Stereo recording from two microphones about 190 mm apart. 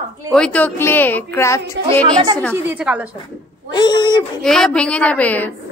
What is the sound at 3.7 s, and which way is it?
Speech, 25° left (ahead or behind).